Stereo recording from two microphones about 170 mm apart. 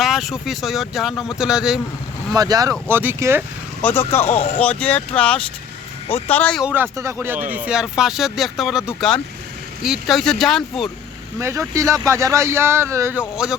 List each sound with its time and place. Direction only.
0.0 s speech: centre (ahead or behind)
2.3 s speech: 20° right (ahead or behind)
3.8 s speech: 10° left (ahead or behind)
4.3 s speech: 40° left (ahead or behind)
4.6 s speech: 10° left (ahead or behind)
6.1 s speech: 35° left (ahead or behind)
6.3 s speech: 10° left (ahead or behind)
6.6 s speech: 10° right (ahead or behind)
11.3 s speech: 15° right (ahead or behind)